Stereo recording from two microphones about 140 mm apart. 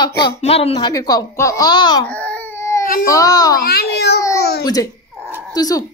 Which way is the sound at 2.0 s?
10° left (ahead or behind).